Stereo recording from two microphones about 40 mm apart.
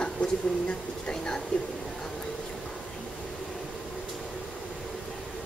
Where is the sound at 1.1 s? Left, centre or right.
Centre.